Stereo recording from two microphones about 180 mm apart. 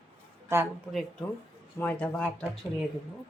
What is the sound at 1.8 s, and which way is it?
Speech, 5° left (ahead or behind).